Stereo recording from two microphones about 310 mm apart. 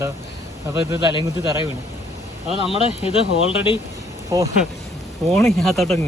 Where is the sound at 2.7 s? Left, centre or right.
Centre.